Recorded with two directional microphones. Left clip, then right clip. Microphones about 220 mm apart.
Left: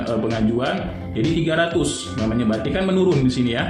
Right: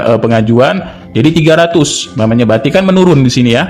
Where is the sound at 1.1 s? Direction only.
50° right (ahead or behind).